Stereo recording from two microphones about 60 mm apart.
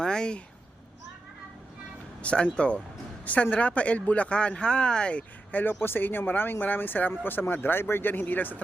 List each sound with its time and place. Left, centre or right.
0.0 s speech: centre
2.2 s speech: centre
5.5 s speech: left